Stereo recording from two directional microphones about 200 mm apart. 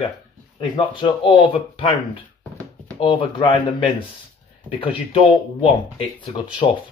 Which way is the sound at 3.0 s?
25° left (ahead or behind).